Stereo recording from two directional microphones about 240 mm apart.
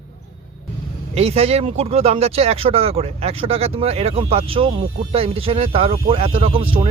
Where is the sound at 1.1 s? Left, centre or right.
Right.